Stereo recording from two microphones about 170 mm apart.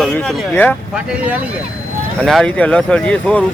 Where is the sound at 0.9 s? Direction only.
5° right (ahead or behind).